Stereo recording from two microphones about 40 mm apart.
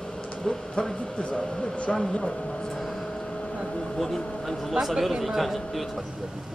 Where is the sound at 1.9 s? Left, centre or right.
Centre.